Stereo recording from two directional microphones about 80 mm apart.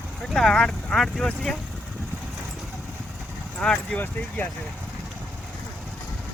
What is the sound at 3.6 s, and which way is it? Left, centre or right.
Speech, centre.